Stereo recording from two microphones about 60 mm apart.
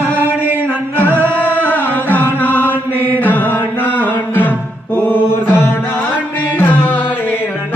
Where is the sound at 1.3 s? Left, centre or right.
Left.